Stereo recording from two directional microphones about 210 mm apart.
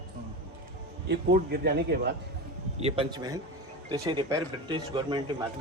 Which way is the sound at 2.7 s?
25° right (ahead or behind).